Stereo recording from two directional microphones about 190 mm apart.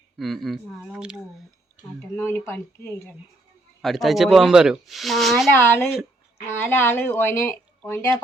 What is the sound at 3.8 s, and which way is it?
Speech, centre (ahead or behind).